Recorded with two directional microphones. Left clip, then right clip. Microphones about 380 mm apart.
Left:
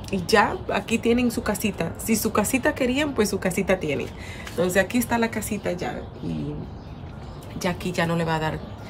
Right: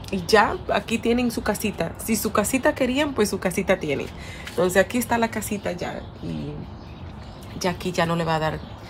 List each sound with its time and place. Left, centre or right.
0.1 s a woman's voice: centre
7.5 s a woman's voice: centre